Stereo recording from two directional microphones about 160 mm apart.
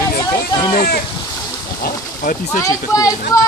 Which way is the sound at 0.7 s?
65° left (ahead or behind).